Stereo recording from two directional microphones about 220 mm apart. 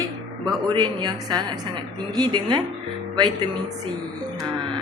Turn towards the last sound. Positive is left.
turn(degrees=-20)  # may be behind; listen again after turning